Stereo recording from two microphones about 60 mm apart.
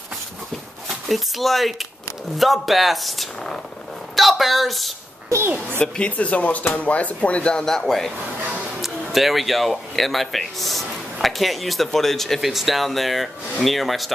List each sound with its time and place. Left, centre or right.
1.0 s a woman's voice: centre
5.3 s a child's voice: right
5.8 s speech: left
7.6 s speech: centre